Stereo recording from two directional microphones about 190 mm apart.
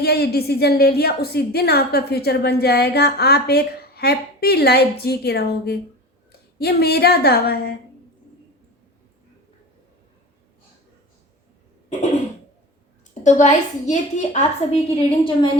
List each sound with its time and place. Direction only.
0.0 s a woman's voice: 55° left (ahead or behind)
13.2 s a woman's voice: 40° left (ahead or behind)
14.7 s a woman's voice: 30° left (ahead or behind)